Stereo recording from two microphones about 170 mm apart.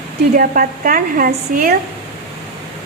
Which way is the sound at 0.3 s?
55° right (ahead or behind).